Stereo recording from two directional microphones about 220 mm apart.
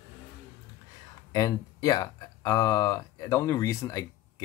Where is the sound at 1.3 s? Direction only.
15° left (ahead or behind).